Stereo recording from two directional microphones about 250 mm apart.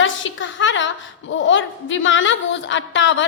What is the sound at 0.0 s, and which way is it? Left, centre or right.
A woman's voice, left.